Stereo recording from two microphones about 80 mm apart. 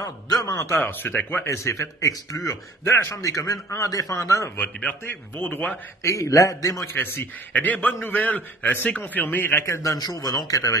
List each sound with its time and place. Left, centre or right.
0.0 s a sound: left
0.7 s a man's voice: left
1.4 s a man's voice: left
2.8 s a man's voice: left
4.6 s a man's voice: centre
6.0 s a man's voice: left
6.9 s a man's voice: left
9.9 s a man's voice: left